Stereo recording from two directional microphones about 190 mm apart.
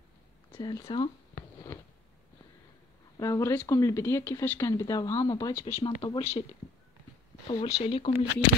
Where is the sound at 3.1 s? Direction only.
20° left (ahead or behind).